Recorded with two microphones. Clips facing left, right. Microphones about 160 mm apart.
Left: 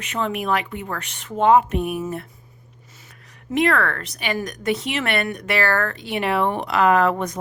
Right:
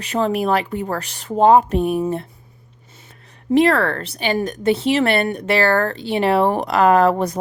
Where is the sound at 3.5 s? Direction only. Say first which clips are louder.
Right 5 dB; 35° right (ahead or behind).